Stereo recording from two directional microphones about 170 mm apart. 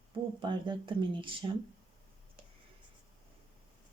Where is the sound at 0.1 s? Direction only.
30° right (ahead or behind).